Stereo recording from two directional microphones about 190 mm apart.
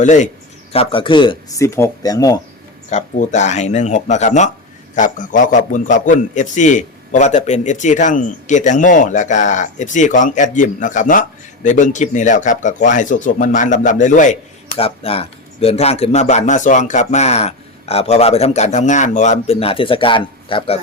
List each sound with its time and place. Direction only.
0.0 s a man's voice: 40° left (ahead or behind); by 2.4 s 20° left (ahead or behind)
2.9 s a man's voice: 40° left (ahead or behind)